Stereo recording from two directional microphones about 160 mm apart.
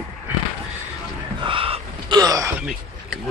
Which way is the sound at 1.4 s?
35° right (ahead or behind).